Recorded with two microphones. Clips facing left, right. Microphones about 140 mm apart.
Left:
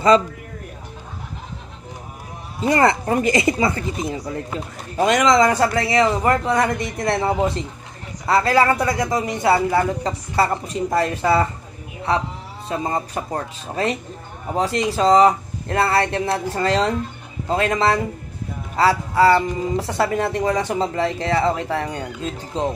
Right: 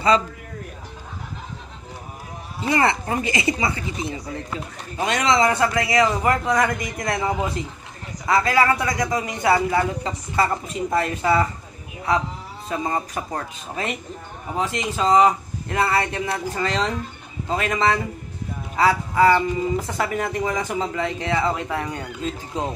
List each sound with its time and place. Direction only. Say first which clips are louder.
2.7 s a man's voice: left 4 dB; 40° left (ahead or behind)
12.6 s speech: left 1 dB; 30° left (ahead or behind)